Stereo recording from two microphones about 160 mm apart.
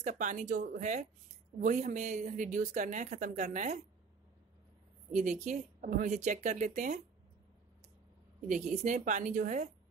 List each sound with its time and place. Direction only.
0.0 s a woman's voice: 50° right (ahead or behind)
5.1 s a woman's voice: 50° right (ahead or behind)
8.5 s a woman's voice: 50° right (ahead or behind)